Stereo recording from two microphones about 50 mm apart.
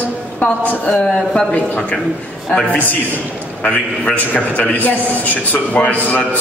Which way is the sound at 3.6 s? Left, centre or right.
Left.